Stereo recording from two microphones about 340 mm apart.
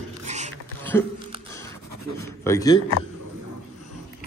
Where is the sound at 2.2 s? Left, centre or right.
Centre.